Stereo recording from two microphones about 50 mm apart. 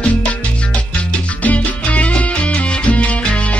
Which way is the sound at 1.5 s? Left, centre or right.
Left.